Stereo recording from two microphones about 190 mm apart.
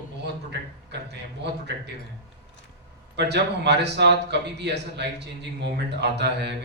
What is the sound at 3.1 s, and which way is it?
Speech, 60° right (ahead or behind).